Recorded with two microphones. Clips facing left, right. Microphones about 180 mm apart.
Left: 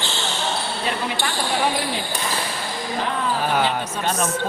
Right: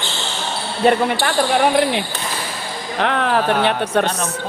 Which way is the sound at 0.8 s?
55° right (ahead or behind).